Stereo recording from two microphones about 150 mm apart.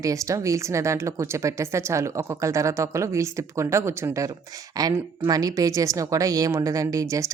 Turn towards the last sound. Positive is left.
turn(degrees=-20)  # may be behind; listen again after turning